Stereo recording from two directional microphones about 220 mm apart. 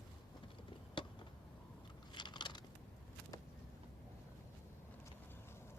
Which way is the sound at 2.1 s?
20° left (ahead or behind).